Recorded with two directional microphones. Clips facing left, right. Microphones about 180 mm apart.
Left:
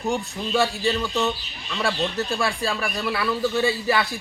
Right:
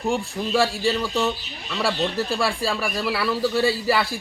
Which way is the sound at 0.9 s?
Centre (ahead or behind).